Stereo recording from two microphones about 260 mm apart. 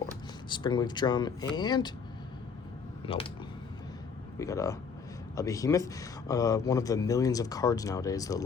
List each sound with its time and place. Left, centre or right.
0.5 s speech: centre
4.4 s speech: centre